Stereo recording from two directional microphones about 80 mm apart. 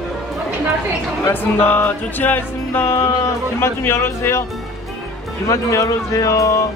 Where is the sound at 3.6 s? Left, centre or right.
Left.